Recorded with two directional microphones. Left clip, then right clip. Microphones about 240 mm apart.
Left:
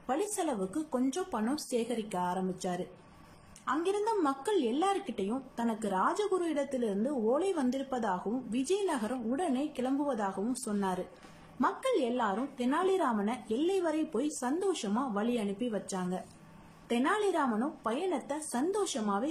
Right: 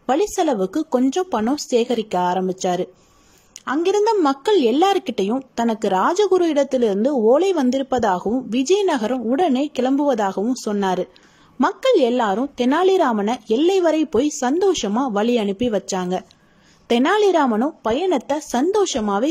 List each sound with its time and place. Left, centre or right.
0.0 s a woman's voice: right